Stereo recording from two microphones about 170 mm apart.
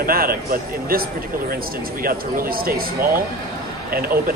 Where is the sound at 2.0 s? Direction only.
60° right (ahead or behind).